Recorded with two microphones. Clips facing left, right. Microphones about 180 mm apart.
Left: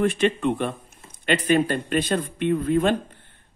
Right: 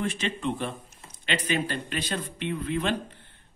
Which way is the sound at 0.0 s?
60° left (ahead or behind).